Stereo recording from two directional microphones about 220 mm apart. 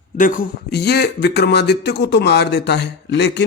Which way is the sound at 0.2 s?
40° left (ahead or behind).